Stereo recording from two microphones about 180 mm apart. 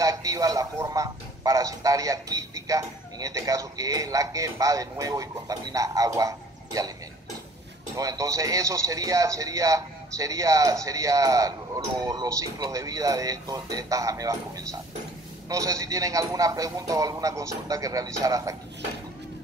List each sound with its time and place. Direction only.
0.0 s speech: 20° right (ahead or behind)
7.9 s a man's voice: 20° right (ahead or behind)